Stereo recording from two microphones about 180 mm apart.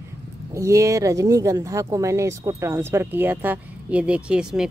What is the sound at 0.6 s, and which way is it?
Speech, 15° right (ahead or behind).